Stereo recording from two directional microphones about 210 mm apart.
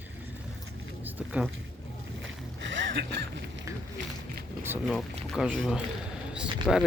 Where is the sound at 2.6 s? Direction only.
60° right (ahead or behind).